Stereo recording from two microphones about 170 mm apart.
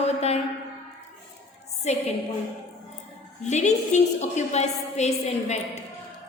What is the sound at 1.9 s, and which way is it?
Speech, 40° left (ahead or behind).